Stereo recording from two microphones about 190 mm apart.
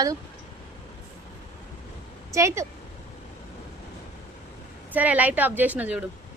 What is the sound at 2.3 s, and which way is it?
Speech, 15° right (ahead or behind).